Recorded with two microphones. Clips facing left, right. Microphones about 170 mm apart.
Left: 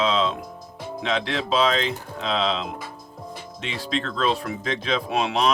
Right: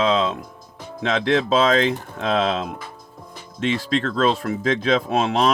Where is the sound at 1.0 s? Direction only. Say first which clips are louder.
Right 6 dB; 45° right (ahead or behind).